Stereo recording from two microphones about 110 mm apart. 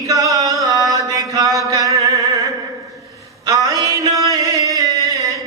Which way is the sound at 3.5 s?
30° right (ahead or behind).